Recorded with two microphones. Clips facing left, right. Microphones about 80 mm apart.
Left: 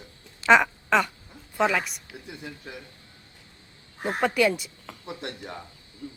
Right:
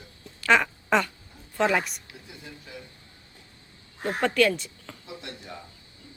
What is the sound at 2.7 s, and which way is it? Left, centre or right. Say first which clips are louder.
Speech: even; left.